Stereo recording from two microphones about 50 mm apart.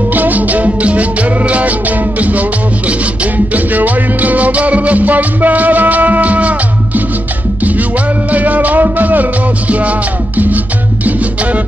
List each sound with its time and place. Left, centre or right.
0.1 s music: right
8.3 s music: right